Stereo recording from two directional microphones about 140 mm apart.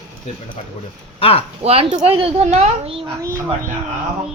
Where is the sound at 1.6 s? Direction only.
45° right (ahead or behind).